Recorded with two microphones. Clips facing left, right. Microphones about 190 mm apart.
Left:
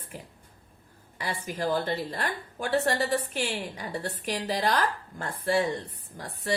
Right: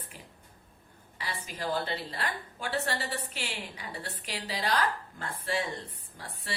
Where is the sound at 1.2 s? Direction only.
50° left (ahead or behind).